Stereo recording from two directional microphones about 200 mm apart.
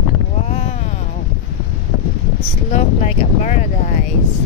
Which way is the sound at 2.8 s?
35° left (ahead or behind).